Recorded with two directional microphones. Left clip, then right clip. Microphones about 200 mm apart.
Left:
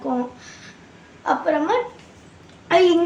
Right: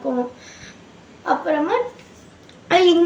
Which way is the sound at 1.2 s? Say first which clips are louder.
Even; 15° left (ahead or behind).